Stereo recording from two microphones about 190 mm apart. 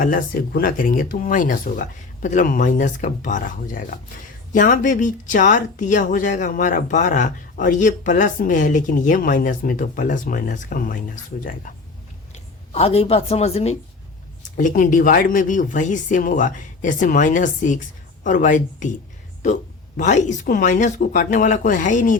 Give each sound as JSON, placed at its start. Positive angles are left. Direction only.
{"t": 0.0, "sound": "speech", "side_deg": 45}
{"t": 12.3, "sound": "a woman's voice", "side_deg": 30}
{"t": 14.5, "sound": "speech", "side_deg": 45}
{"t": 20.0, "sound": "speech", "side_deg": 40}